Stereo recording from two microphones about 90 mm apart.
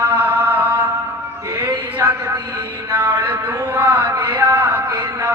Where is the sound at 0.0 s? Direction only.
20° right (ahead or behind).